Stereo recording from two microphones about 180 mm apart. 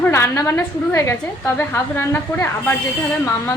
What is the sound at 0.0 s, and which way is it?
A woman's voice, 15° left (ahead or behind).